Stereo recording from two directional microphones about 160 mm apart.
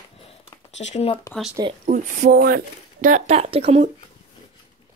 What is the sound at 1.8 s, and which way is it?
Speech, 55° right (ahead or behind).